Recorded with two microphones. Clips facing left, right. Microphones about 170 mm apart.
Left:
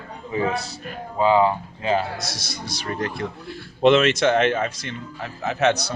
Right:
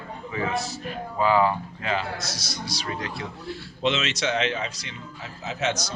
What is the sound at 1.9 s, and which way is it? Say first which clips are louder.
A man's voice: left 4 dB; 55° left (ahead or behind).